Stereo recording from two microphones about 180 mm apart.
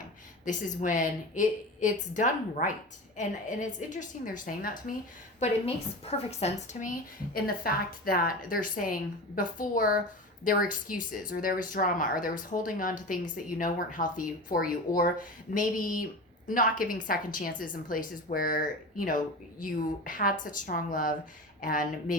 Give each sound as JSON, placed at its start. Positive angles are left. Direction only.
{"t": 0.4, "sound": "speech", "side_deg": 45}
{"t": 5.4, "sound": "speech", "side_deg": 35}